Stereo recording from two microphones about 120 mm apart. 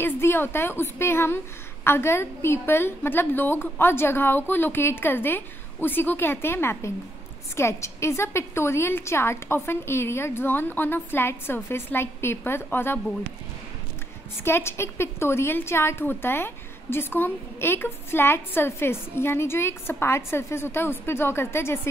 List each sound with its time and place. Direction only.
0.0 s a woman's voice: 20° left (ahead or behind)
14.4 s a woman's voice: 20° left (ahead or behind)